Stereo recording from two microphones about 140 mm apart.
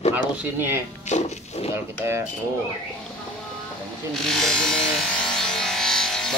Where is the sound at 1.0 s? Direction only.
50° left (ahead or behind).